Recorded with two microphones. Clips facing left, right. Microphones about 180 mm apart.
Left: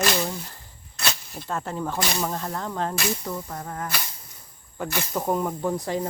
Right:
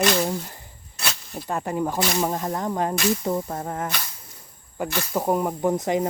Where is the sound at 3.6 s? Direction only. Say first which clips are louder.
Right 4 dB; 25° right (ahead or behind).